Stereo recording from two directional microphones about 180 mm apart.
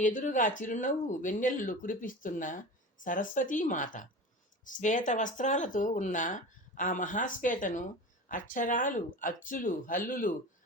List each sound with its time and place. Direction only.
0.0 s speech: 45° left (ahead or behind)